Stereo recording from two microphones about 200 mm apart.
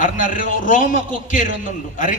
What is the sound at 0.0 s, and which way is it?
A man's voice, 40° left (ahead or behind).